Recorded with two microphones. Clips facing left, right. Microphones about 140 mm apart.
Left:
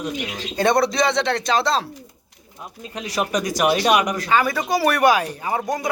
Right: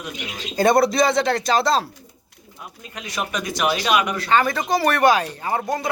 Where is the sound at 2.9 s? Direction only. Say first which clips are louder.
Left 4 dB; 35° left (ahead or behind).